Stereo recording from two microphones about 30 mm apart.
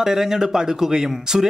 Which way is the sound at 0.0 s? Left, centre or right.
Centre.